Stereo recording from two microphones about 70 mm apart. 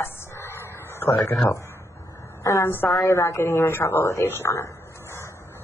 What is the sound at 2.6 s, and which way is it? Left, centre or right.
Speech, left.